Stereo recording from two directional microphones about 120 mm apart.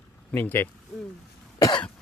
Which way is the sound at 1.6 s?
40° left (ahead or behind).